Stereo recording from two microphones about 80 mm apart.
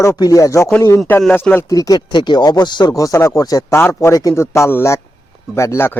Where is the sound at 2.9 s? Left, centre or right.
Left.